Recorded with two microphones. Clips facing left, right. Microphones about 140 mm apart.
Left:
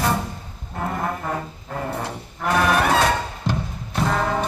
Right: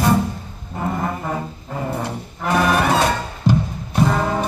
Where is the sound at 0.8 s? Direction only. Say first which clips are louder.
Right 2 dB; 5° right (ahead or behind).